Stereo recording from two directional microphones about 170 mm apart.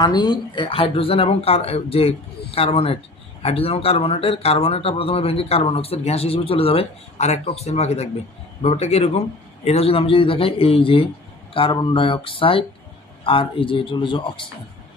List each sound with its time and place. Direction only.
0.0 s speech: 25° left (ahead or behind)